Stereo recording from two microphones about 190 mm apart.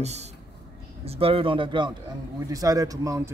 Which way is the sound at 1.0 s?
30° right (ahead or behind).